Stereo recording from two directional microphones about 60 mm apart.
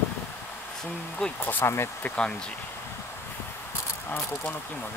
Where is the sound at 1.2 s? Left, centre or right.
Centre.